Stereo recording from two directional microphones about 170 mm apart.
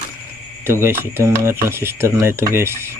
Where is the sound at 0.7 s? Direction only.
15° right (ahead or behind).